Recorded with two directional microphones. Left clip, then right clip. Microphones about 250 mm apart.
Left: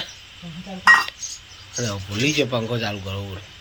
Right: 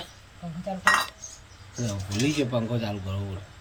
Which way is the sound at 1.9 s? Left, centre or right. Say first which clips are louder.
Left 5 dB; centre.